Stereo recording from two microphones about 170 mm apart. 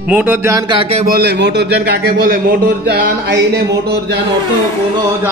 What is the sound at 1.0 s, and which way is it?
A man's voice, 65° right (ahead or behind).